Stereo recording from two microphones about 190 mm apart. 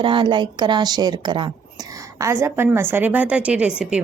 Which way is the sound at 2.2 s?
15° right (ahead or behind).